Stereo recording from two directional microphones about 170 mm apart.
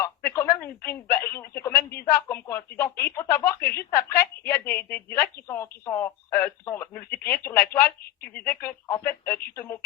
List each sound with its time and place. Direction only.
0.3 s a woman's voice: 15° left (ahead or behind)